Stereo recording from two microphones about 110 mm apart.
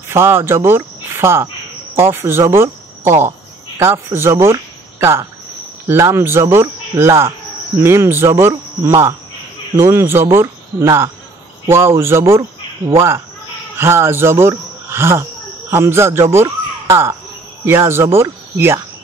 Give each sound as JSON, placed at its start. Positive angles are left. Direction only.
{"t": 0.1, "sound": "speech", "side_deg": -25}
{"t": 5.9, "sound": "speech", "side_deg": -25}
{"t": 13.7, "sound": "speech", "side_deg": -20}